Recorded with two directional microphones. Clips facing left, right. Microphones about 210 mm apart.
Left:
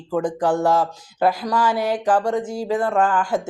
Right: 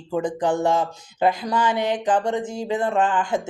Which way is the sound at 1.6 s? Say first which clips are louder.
Left 2 dB; 5° left (ahead or behind).